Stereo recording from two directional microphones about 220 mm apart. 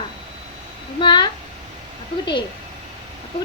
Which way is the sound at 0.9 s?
20° left (ahead or behind).